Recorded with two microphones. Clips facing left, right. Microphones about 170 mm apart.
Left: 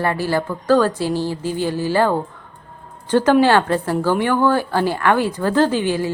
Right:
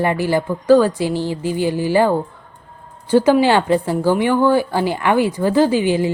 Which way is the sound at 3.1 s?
10° right (ahead or behind).